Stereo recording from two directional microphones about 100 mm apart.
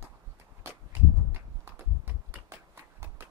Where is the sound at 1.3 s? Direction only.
25° right (ahead or behind).